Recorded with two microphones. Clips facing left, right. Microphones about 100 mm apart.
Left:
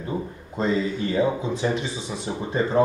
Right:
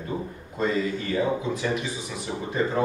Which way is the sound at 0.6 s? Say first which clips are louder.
Left 2 dB; 25° left (ahead or behind).